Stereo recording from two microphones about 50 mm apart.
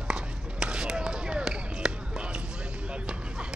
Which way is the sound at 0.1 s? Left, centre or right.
Centre.